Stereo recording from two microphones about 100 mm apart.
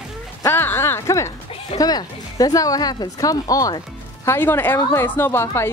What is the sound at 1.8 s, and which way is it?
A woman's voice, 40° left (ahead or behind).